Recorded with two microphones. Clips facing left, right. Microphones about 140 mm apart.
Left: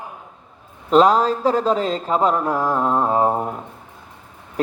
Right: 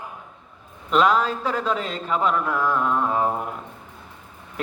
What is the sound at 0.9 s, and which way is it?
Speech, 35° left (ahead or behind).